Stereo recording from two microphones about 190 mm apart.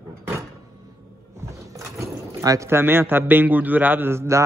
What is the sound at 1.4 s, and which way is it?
Speech, 15° right (ahead or behind).